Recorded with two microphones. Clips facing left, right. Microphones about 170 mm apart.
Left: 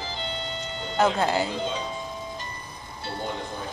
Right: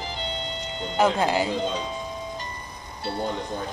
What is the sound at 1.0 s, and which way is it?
Speech, 15° right (ahead or behind).